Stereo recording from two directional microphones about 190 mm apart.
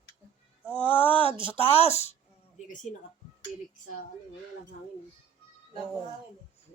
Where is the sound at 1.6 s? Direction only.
30° left (ahead or behind).